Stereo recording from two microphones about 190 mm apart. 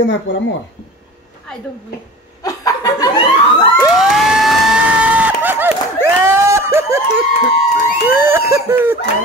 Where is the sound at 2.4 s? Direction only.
20° left (ahead or behind).